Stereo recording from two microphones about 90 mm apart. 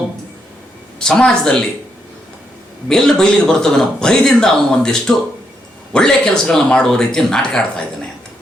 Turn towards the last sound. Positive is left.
turn(degrees=10)  # may be behind; listen again after turning